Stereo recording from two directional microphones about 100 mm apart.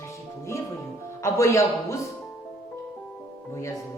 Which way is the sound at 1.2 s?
30° left (ahead or behind).